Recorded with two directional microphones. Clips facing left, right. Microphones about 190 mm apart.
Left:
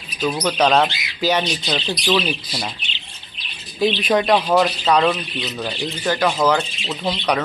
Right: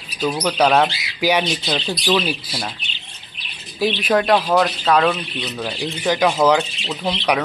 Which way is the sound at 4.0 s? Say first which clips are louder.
Right 2 dB; centre (ahead or behind).